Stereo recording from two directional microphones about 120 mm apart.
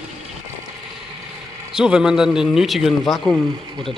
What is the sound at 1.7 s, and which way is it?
Speech, 5° right (ahead or behind).